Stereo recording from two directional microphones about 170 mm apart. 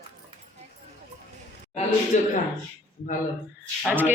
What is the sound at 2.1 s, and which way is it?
Speech, 45° left (ahead or behind).